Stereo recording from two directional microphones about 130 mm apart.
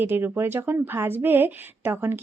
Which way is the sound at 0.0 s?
15° right (ahead or behind).